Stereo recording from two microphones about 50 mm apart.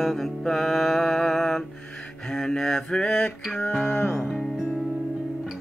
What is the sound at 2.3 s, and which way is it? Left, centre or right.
Mantra, centre.